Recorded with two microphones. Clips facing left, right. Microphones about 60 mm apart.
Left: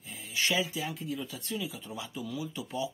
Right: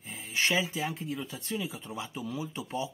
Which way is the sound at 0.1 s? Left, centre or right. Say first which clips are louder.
Right 2 dB; right.